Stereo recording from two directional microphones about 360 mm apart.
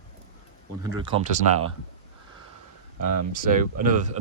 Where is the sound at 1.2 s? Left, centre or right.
Right.